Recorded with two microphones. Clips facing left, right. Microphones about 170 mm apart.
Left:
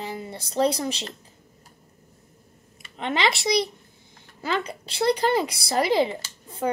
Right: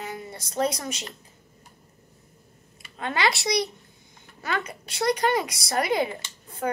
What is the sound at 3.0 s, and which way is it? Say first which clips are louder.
Speech: left 1 dB; 20° left (ahead or behind).